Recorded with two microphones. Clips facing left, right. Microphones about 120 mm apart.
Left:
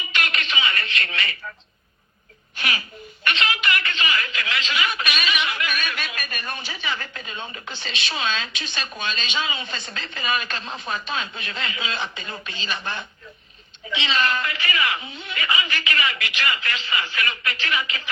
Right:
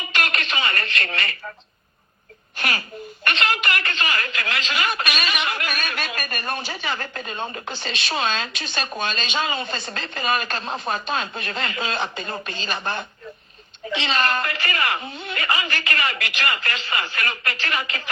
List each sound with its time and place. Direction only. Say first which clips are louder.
0.0 s telephone: right 2 dB; 45° right (ahead or behind)
2.6 s a woman's voice: right 2 dB; 45° right (ahead or behind)